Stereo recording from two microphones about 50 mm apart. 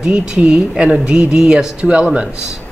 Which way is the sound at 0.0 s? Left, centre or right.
Centre.